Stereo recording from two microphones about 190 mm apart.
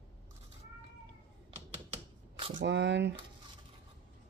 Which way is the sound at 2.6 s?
65° right (ahead or behind).